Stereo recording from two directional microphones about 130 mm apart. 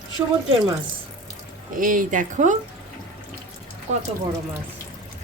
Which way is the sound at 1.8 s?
90° right.